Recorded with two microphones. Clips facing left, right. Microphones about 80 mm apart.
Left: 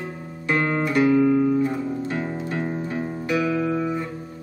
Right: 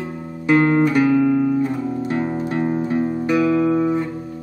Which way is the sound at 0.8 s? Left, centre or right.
Centre.